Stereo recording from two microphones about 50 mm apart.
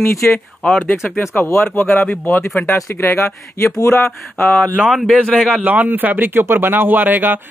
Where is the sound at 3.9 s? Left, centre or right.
Centre.